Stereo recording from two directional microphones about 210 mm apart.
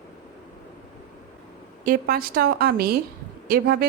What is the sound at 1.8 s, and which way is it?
A woman's voice, 45° right (ahead or behind).